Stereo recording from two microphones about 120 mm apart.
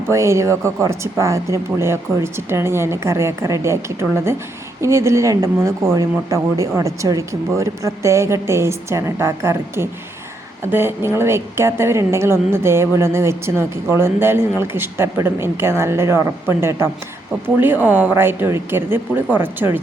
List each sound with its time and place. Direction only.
0.1 s a woman's voice: 25° right (ahead or behind)